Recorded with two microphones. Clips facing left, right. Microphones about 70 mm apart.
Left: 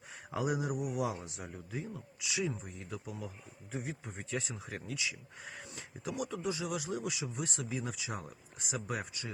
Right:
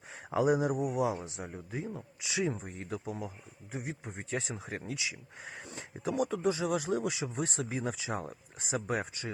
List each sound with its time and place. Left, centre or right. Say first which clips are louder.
0.3 s speech: right 7 dB; right
2.6 s speech: right 5 dB; right
3.2 s speech: right 4 dB; right